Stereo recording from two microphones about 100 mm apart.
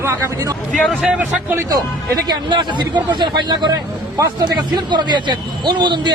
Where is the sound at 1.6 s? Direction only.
40° right (ahead or behind).